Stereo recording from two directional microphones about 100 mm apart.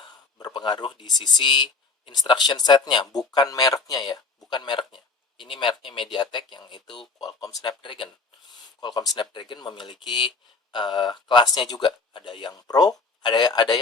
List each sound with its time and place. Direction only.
0.0 s speech: 50° left (ahead or behind)
7.6 s speech: 50° left (ahead or behind)
8.8 s speech: 40° left (ahead or behind)